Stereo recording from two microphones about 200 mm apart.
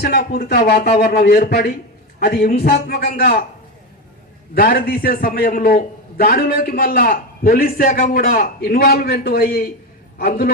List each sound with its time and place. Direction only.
0.0 s a man's voice: 50° left (ahead or behind)
4.5 s a man's voice: 45° left (ahead or behind)